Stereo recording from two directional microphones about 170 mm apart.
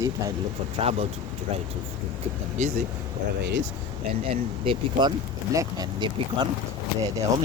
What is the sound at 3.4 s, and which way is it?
Speech, 90° right.